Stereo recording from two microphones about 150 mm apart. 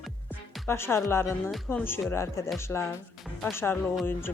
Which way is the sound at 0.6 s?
15° left (ahead or behind).